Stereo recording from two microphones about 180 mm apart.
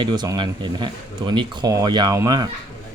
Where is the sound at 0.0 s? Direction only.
25° right (ahead or behind).